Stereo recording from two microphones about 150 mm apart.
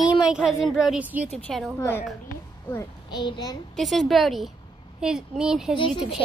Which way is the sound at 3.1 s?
30° left (ahead or behind).